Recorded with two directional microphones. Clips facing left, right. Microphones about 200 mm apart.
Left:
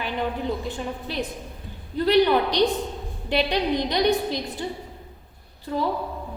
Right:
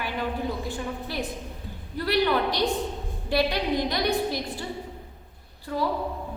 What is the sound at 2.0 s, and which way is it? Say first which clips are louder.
A woman's voice: left 5 dB; 20° left (ahead or behind).